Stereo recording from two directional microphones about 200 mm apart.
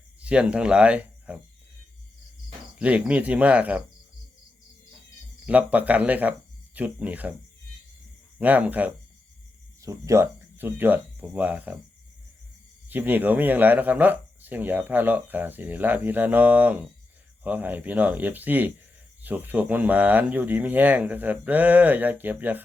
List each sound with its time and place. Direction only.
0.2 s speech: 5° right (ahead or behind)
2.7 s speech: 5° right (ahead or behind)
5.5 s speech: 5° right (ahead or behind)
8.4 s speech: 5° right (ahead or behind)
12.9 s speech: 10° right (ahead or behind)